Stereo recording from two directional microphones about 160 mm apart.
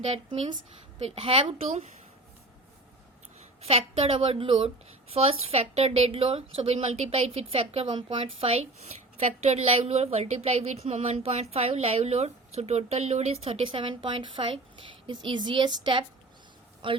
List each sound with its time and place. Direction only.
0.0 s speech: 40° right (ahead or behind)
3.6 s a woman's voice: 40° right (ahead or behind)